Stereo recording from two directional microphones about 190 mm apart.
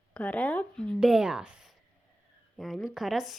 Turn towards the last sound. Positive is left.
turn(degrees=0)  # may be behind; listen again after turning